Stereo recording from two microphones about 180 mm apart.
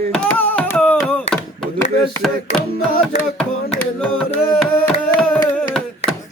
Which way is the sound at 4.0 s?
5° left (ahead or behind).